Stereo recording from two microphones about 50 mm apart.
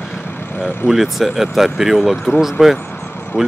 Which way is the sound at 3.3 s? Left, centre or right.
Left.